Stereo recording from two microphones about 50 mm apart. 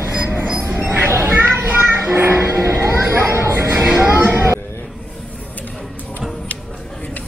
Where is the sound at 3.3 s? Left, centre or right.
Right.